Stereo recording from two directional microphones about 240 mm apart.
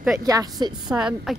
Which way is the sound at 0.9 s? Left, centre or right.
Centre.